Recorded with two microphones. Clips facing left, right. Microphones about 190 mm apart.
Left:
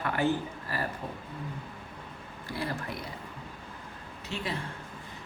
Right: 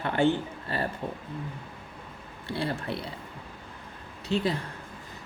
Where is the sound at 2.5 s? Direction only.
30° right (ahead or behind).